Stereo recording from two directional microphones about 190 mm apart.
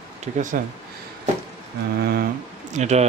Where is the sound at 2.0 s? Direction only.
55° right (ahead or behind).